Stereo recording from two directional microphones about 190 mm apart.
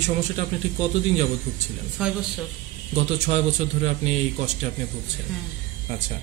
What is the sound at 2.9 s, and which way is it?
A man's voice, 35° right (ahead or behind).